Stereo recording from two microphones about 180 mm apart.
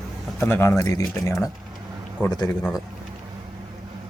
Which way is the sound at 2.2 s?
5° left (ahead or behind).